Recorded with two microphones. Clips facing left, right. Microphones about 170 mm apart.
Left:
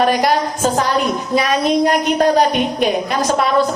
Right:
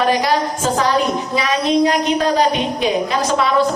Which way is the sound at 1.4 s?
50° left (ahead or behind).